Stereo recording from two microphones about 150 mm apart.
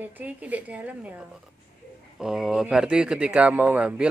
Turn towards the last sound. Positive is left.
turn(degrees=-10)  # may be behind; listen again after turning